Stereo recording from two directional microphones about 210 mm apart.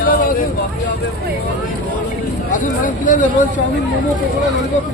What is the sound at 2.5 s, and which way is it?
Speech, 40° left (ahead or behind).